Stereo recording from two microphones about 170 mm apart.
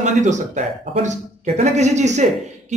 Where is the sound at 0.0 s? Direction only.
45° right (ahead or behind).